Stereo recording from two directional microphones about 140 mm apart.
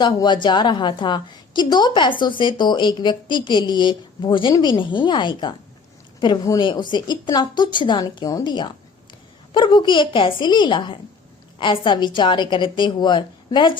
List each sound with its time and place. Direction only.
0.0 s a woman's voice: 30° left (ahead or behind)